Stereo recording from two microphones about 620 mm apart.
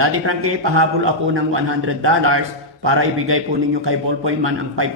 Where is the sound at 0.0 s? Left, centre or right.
Right.